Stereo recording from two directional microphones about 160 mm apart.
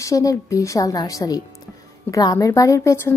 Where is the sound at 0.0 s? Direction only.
20° left (ahead or behind).